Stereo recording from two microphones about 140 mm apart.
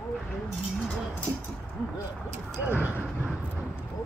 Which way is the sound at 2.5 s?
15° right (ahead or behind).